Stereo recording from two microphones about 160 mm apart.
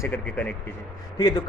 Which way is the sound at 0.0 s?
10° left (ahead or behind).